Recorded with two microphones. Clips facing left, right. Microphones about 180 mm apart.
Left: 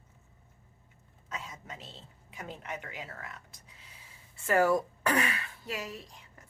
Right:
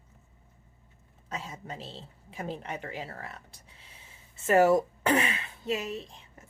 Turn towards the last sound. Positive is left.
turn(degrees=-25)  # may be behind; listen again after turning